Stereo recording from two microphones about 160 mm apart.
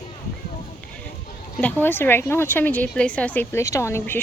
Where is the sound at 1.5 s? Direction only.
10° left (ahead or behind).